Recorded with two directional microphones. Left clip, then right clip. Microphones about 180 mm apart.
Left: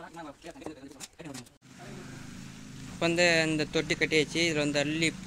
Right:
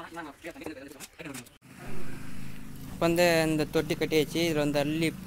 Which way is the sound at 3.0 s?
5° right (ahead or behind).